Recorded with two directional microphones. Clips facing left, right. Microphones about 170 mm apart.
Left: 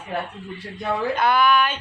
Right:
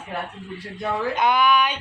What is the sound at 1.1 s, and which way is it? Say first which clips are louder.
Speech: left 1 dB; 20° right (ahead or behind).